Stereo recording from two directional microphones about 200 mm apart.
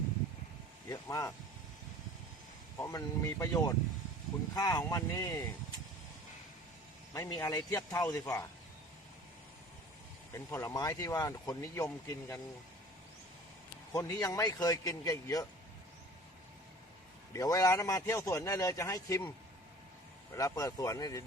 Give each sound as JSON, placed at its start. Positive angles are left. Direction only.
{"t": 0.9, "sound": "speech", "side_deg": 15}
{"t": 2.7, "sound": "speech", "side_deg": 15}
{"t": 7.1, "sound": "speech", "side_deg": 15}
{"t": 10.3, "sound": "speech", "side_deg": 15}
{"t": 13.9, "sound": "speech", "side_deg": 15}
{"t": 17.3, "sound": "speech", "side_deg": 15}
{"t": 20.3, "sound": "speech", "side_deg": 15}